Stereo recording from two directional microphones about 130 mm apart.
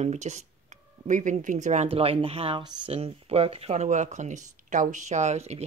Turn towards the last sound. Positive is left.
turn(degrees=-55)  # may be behind; listen again after turning